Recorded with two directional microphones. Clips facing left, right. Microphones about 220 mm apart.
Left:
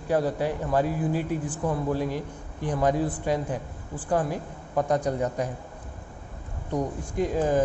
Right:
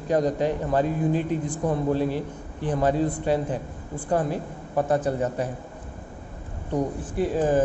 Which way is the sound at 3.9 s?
10° right (ahead or behind).